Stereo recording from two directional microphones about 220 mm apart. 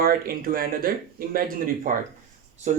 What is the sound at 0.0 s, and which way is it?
Speech, 40° right (ahead or behind).